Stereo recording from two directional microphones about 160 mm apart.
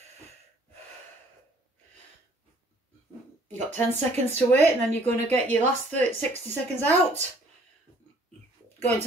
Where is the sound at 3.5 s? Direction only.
10° left (ahead or behind).